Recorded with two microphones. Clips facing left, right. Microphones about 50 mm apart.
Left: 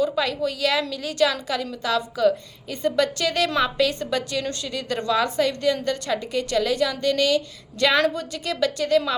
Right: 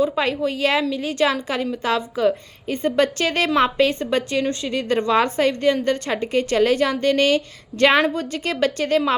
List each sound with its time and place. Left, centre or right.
0.0 s a woman's voice: right